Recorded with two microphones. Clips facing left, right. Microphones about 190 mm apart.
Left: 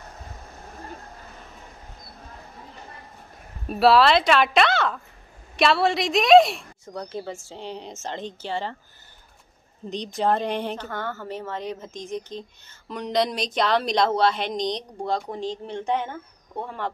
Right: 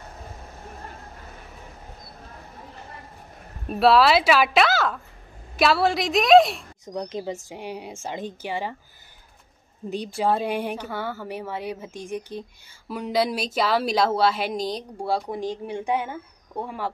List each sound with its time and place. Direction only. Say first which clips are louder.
3.6 s a woman's voice: even; centre (ahead or behind)
6.9 s a woman's voice: right 3 dB; 20° right (ahead or behind)
9.8 s a woman's voice: even; 10° right (ahead or behind)